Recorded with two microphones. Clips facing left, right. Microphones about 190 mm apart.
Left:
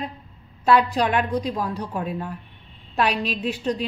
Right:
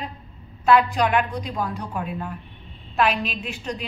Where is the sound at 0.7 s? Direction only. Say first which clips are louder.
Right 1 dB; 35° left (ahead or behind).